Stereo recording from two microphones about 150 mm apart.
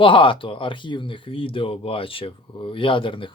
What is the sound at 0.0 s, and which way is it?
Speech, 35° left (ahead or behind).